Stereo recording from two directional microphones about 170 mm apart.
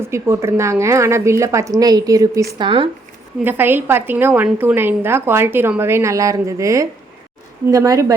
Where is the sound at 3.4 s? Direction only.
10° right (ahead or behind).